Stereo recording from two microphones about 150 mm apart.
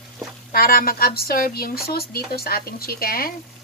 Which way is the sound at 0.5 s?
80° left.